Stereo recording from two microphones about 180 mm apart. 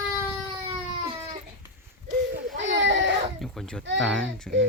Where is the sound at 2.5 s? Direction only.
85° right.